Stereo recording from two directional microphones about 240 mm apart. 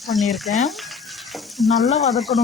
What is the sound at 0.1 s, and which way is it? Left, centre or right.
Frying, centre.